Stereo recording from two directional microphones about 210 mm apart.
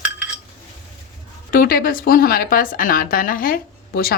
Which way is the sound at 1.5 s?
45° left (ahead or behind).